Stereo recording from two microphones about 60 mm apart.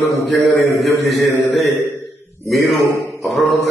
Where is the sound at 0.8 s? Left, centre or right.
Centre.